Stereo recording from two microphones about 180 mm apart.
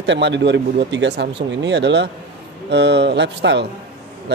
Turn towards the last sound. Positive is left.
turn(degrees=-70)  # may be behind; listen again after turning